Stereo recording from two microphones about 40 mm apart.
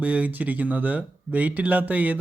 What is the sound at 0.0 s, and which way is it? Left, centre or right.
Speech, right.